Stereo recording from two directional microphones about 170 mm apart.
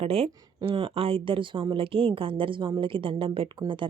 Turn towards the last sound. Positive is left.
turn(degrees=-30)  # may be behind; listen again after turning